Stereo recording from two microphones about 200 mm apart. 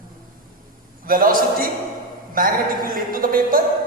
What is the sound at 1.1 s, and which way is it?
A man's voice, 45° right (ahead or behind).